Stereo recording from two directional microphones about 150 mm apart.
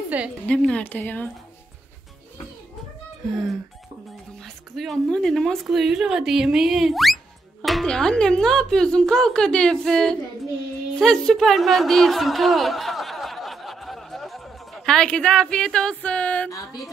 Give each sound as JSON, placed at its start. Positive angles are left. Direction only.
{"t": 0.1, "sound": "a woman's voice", "side_deg": -10}
{"t": 0.5, "sound": "speech", "side_deg": 5}
{"t": 4.4, "sound": "a woman's voice", "side_deg": 0}
{"t": 16.4, "sound": "music", "side_deg": 20}